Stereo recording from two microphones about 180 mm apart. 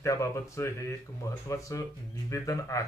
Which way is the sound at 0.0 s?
15° left (ahead or behind).